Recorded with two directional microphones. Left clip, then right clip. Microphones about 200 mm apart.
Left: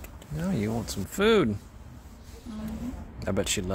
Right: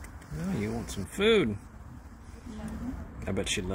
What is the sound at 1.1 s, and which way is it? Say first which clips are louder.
Speech: left 2 dB; 20° left (ahead or behind).